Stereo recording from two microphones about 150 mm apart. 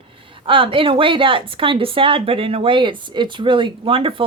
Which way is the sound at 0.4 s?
35° right (ahead or behind).